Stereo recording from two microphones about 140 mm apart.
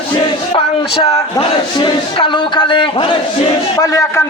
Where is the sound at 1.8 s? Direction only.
35° left (ahead or behind).